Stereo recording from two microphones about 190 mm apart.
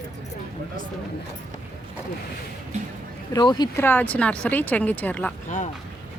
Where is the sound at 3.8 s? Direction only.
10° left (ahead or behind).